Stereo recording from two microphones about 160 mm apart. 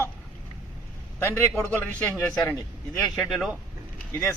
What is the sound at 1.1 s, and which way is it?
A man's voice, 15° left (ahead or behind).